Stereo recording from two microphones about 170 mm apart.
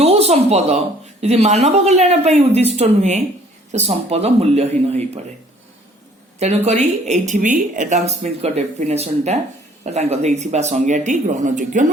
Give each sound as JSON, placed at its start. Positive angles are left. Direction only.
{"t": 0.0, "sound": "speech", "side_deg": -40}
{"t": 6.7, "sound": "speech", "side_deg": -40}